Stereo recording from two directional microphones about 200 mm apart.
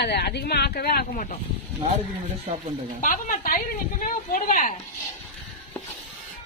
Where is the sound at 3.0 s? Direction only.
40° left (ahead or behind).